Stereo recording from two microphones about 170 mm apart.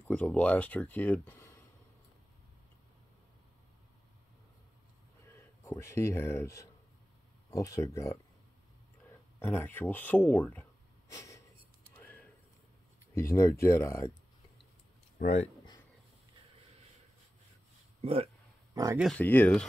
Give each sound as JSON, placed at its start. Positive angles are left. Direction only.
{"t": 0.0, "sound": "speech", "side_deg": 10}
{"t": 5.2, "sound": "speech", "side_deg": 15}
{"t": 9.4, "sound": "speech", "side_deg": 10}
{"t": 11.1, "sound": "snort", "side_deg": 20}
{"t": 12.0, "sound": "a sound", "side_deg": 10}
{"t": 13.1, "sound": "speech", "side_deg": 15}
{"t": 15.1, "sound": "speech", "side_deg": 40}
{"t": 18.0, "sound": "speech", "side_deg": -35}
{"t": 19.1, "sound": "speech", "side_deg": 10}